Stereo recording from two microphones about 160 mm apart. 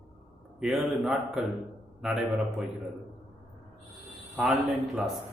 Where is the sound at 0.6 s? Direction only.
5° right (ahead or behind).